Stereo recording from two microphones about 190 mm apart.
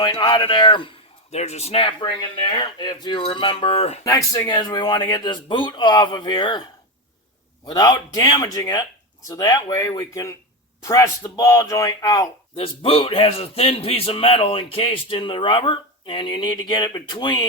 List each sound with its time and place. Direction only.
0.0 s a man's voice: 20° left (ahead or behind)
4.0 s a man's voice: 20° left (ahead or behind)
7.6 s a man's voice: 20° left (ahead or behind)